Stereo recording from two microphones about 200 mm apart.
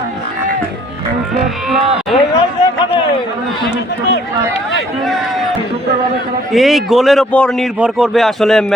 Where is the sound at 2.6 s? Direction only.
20° left (ahead or behind).